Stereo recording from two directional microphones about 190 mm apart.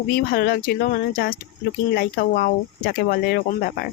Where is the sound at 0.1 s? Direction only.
55° left (ahead or behind).